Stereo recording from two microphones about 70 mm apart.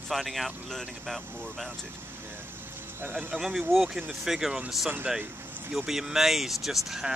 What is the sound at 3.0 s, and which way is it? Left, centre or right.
Speech, right.